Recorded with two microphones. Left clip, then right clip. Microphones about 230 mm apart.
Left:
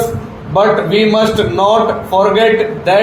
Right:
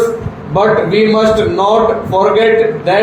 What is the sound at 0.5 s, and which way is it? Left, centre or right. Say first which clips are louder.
A man's voice: even; left.